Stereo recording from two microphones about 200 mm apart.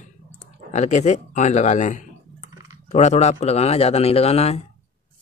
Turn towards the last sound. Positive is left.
turn(degrees=30)  # may be behind; listen again after turning